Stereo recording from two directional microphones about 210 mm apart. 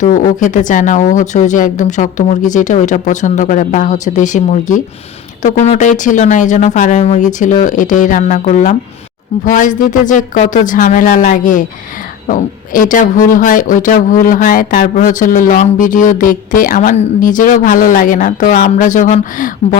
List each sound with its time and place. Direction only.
0.0 s speech: 40° left (ahead or behind)